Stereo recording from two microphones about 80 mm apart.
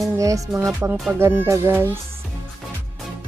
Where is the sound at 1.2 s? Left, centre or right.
Right.